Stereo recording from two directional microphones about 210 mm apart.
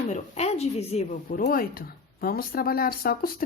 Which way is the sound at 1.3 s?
40° left (ahead or behind).